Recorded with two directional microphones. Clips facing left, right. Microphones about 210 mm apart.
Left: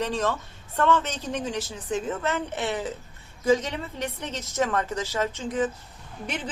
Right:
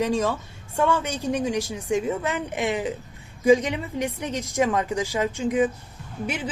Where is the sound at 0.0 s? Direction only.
10° right (ahead or behind).